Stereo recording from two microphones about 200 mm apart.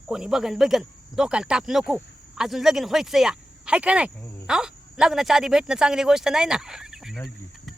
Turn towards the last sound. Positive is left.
turn(degrees=0)  # may be behind; listen again after turning